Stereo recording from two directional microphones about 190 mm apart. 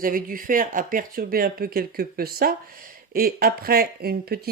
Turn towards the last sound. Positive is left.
turn(degrees=-55)  # may be behind; listen again after turning